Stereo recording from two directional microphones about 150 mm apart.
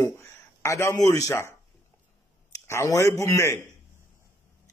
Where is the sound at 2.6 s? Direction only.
20° left (ahead or behind).